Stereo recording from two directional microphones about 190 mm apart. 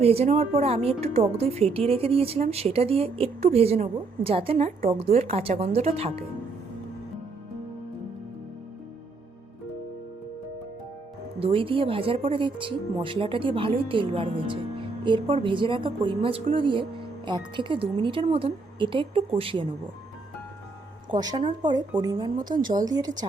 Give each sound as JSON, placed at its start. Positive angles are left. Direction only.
{"t": 0.0, "sound": "a woman's voice", "side_deg": -30}
{"t": 11.3, "sound": "speech", "side_deg": -30}
{"t": 21.1, "sound": "speech", "side_deg": -20}